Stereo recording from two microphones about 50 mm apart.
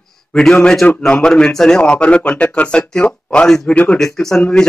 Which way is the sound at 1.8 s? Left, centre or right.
Left.